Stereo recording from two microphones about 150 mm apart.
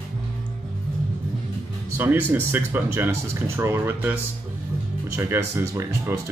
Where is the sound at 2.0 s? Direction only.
15° right (ahead or behind).